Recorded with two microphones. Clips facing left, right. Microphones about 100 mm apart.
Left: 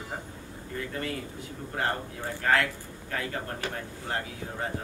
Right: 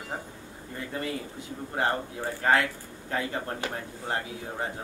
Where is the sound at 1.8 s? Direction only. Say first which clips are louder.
Right 3 dB; 20° right (ahead or behind).